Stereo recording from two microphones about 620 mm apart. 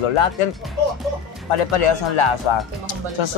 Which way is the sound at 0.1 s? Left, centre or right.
Left.